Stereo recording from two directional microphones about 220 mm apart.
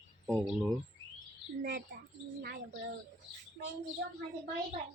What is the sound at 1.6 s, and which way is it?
Speech, 45° right (ahead or behind).